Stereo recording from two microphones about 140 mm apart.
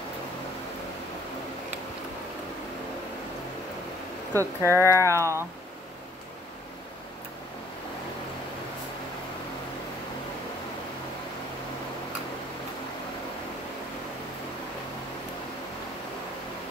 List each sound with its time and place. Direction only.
4.4 s speech: 20° right (ahead or behind)